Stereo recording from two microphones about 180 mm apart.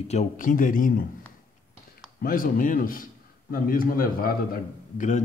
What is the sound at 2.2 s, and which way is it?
Speech, 50° left (ahead or behind).